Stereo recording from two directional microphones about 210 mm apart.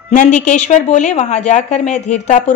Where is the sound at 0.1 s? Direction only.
35° left (ahead or behind).